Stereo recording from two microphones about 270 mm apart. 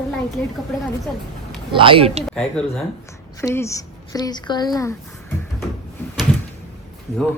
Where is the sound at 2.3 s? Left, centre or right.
Centre.